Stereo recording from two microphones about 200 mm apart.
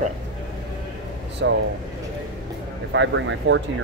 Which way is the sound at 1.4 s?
60° right (ahead or behind).